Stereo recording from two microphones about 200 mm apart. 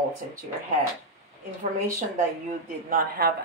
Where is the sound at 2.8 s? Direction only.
45° right (ahead or behind).